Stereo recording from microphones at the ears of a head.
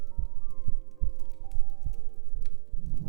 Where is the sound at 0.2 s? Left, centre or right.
Right.